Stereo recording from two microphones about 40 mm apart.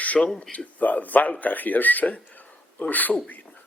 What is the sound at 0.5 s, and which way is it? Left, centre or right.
A man's voice, left.